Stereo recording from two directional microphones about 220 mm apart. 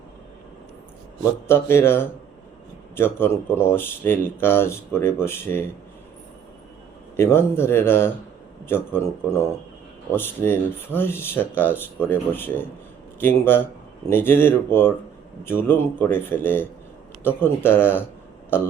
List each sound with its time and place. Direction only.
1.2 s speech: 10° left (ahead or behind)
7.2 s a man's voice: 10° left (ahead or behind)